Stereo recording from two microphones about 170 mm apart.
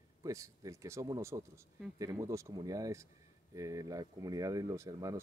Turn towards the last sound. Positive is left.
turn(degrees=-20)  # may be behind; listen again after turning